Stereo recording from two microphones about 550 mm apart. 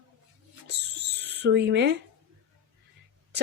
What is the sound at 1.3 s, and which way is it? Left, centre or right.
Speech, centre.